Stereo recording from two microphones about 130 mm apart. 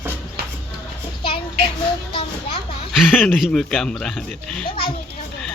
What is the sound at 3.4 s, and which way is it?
Speech, centre (ahead or behind).